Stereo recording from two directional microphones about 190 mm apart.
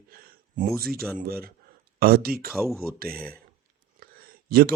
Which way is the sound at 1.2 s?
50° right (ahead or behind).